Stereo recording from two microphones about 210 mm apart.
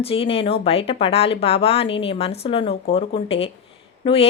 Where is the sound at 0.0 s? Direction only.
25° left (ahead or behind).